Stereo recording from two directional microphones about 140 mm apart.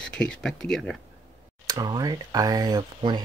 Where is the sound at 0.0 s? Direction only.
5° left (ahead or behind).